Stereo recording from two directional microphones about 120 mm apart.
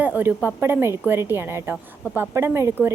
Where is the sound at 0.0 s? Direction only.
15° right (ahead or behind).